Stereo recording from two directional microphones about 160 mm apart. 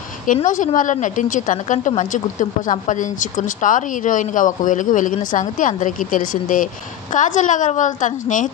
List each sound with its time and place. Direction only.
0.3 s a woman's voice: 50° left (ahead or behind)